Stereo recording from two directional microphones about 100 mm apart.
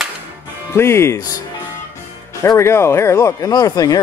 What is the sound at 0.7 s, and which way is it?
Music, 25° left (ahead or behind).